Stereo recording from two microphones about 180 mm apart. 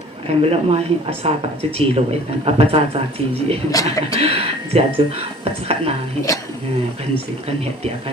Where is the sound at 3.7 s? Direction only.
20° left (ahead or behind).